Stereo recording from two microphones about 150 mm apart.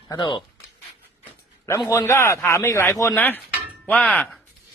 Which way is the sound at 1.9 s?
20° left (ahead or behind).